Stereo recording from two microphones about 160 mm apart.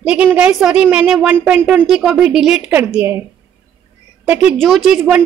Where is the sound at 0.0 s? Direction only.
5° right (ahead or behind).